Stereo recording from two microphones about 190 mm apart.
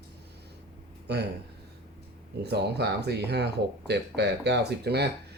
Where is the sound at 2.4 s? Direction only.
60° right (ahead or behind).